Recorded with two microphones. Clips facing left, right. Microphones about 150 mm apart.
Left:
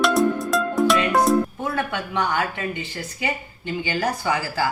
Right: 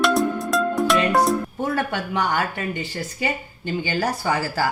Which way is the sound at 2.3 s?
40° right (ahead or behind).